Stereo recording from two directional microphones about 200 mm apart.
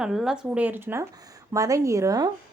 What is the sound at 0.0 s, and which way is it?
A woman's voice, 5° right (ahead or behind).